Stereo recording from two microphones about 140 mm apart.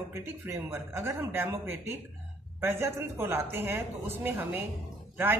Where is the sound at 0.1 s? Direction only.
20° right (ahead or behind).